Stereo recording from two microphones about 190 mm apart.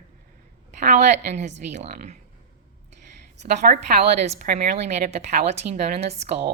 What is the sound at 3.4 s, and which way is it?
A woman's voice, 40° right (ahead or behind).